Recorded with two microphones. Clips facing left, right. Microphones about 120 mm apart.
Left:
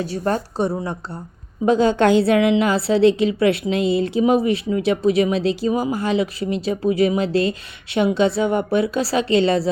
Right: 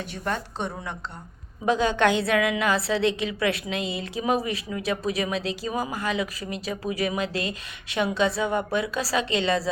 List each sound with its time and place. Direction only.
0.0 s a woman's voice: 35° left (ahead or behind)